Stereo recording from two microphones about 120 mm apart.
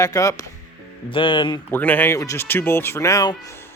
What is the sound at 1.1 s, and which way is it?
Speech, 45° left (ahead or behind).